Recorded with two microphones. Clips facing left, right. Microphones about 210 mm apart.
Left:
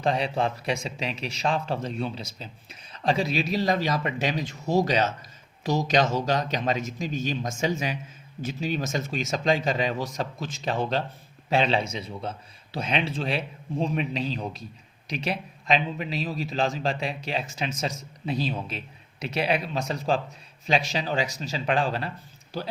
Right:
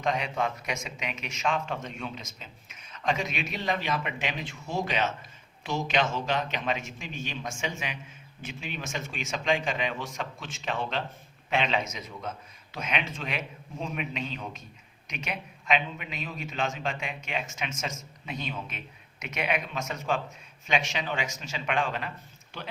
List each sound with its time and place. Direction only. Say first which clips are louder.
0.0 s a man's voice: left 4 dB; 35° left (ahead or behind)